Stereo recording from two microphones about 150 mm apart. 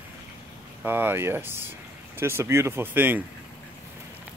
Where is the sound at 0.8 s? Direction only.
15° right (ahead or behind).